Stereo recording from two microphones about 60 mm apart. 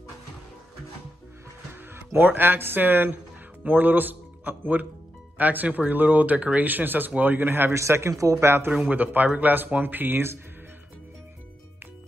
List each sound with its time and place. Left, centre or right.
1.7 s speech: right
7.7 s a man's voice: right
8.1 s speech: right
8.8 s speech: right